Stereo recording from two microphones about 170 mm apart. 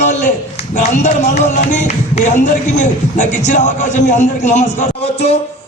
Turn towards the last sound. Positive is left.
turn(degrees=40)  # may be behind; listen again after turning